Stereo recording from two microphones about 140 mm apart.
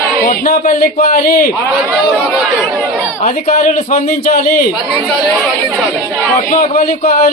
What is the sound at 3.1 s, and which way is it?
A man's voice, 60° left (ahead or behind).